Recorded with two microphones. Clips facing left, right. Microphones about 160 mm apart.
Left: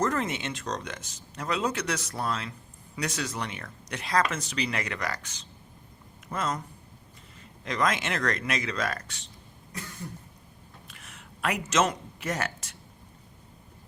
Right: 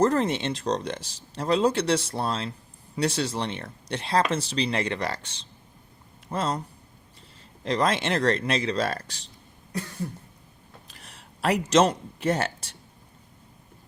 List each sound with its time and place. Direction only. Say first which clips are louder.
0.0 s speech: right 6 dB; 30° right (ahead or behind)
7.6 s speech: right 4 dB; 30° right (ahead or behind)
10.8 s speech: even; 35° right (ahead or behind)